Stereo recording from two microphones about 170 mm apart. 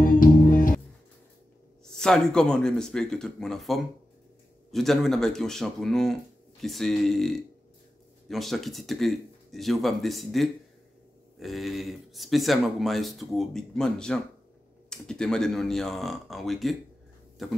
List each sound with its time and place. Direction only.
0.0 s music: 55° left (ahead or behind)
1.9 s speech: 5° left (ahead or behind)